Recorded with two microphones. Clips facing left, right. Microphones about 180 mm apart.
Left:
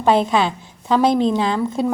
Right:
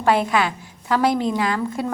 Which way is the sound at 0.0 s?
25° left (ahead or behind).